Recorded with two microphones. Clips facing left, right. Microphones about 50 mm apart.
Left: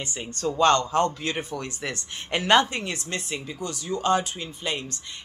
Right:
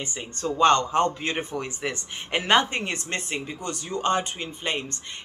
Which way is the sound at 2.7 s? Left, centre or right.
Right.